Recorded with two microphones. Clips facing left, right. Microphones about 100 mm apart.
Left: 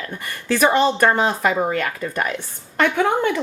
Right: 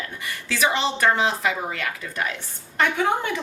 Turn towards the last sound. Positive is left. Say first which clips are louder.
# left 4 dB
turn(degrees=55)  # may be behind; listen again after turning